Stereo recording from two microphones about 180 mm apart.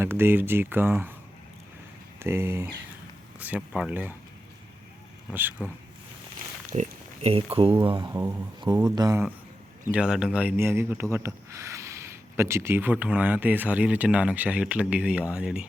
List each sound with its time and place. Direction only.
0.0 s speech: 10° right (ahead or behind)
2.1 s speech: 15° right (ahead or behind)
5.3 s speech: 10° right (ahead or behind)
6.7 s oink: 35° right (ahead or behind)
7.5 s speech: 30° right (ahead or behind)
9.9 s speech: 5° right (ahead or behind)